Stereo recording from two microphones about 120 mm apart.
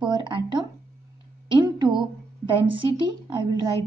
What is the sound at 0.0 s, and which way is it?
Speech, 40° right (ahead or behind).